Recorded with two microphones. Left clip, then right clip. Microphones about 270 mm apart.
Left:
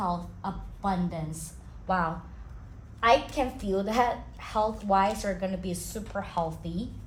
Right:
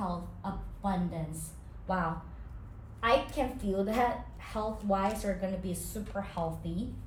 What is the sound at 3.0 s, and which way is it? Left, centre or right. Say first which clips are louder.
A woman's voice: left 5 dB; left.